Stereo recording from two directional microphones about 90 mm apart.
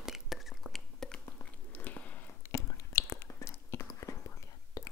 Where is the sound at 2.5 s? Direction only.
35° left (ahead or behind).